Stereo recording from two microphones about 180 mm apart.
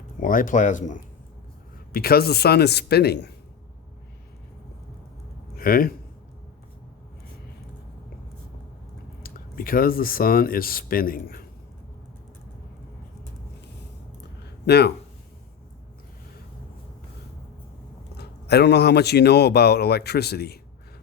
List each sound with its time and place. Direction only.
0.2 s speech: 50° left (ahead or behind)
1.9 s speech: 60° left (ahead or behind)
5.5 s speech: 55° left (ahead or behind)
9.2 s speech: 55° left (ahead or behind)
14.7 s speech: 65° left (ahead or behind)
18.2 s speech: 65° left (ahead or behind)